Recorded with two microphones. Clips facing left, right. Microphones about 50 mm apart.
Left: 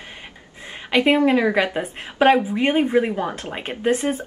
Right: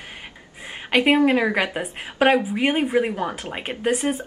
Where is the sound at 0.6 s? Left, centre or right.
Centre.